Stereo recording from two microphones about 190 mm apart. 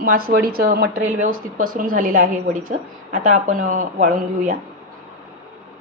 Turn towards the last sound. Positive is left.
turn(degrees=-40)  # may be behind; listen again after turning